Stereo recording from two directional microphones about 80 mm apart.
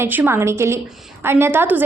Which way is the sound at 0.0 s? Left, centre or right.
Right.